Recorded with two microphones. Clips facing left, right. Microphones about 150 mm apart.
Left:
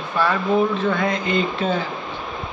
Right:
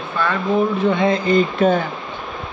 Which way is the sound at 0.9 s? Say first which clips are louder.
Right 4 dB; 25° right (ahead or behind).